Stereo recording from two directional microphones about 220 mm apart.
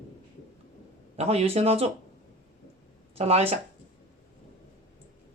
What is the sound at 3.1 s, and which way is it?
Speech, 30° right (ahead or behind).